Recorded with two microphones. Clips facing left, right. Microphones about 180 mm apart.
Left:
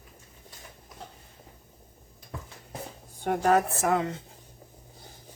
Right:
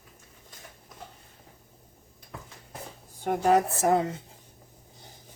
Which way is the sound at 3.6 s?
25° right (ahead or behind).